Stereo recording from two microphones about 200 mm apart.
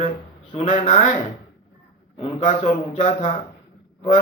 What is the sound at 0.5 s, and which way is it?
Speech, 30° left (ahead or behind).